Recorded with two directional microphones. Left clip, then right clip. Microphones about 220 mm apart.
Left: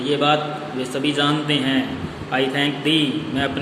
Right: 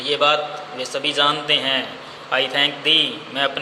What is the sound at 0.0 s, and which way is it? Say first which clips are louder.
A man's voice: right 1 dB; 25° right (ahead or behind).